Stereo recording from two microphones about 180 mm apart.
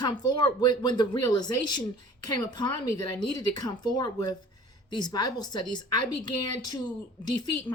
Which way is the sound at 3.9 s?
25° left (ahead or behind).